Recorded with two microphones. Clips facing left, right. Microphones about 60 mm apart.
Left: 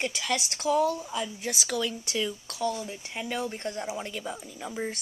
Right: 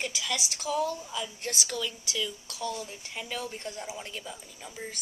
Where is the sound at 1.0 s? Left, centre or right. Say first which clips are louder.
Left 3 dB; left.